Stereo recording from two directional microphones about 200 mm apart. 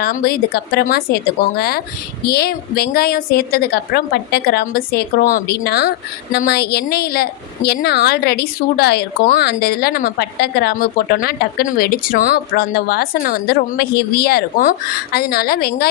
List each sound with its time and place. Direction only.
0.0 s a woman's voice: 50° left (ahead or behind)